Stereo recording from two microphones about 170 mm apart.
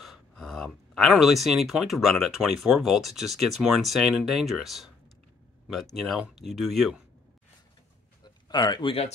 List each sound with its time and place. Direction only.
0.0 s speech: centre (ahead or behind)
5.9 s speech: centre (ahead or behind)
8.2 s a sound: 25° left (ahead or behind)